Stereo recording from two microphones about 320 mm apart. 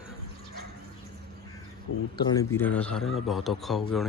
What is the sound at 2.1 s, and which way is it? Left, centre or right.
Speech, centre.